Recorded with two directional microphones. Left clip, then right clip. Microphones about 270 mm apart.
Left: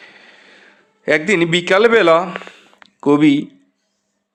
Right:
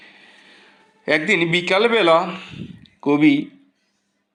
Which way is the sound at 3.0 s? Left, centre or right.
Left.